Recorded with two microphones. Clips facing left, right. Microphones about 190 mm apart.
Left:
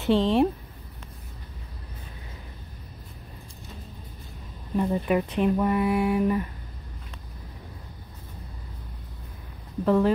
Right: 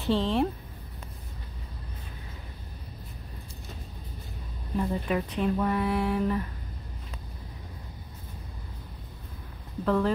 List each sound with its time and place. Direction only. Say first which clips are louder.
0.0 s speech: left 5 dB; 20° left (ahead or behind)
4.7 s speech: left 4 dB; 15° left (ahead or behind)
9.8 s speech: left 4 dB; 20° left (ahead or behind)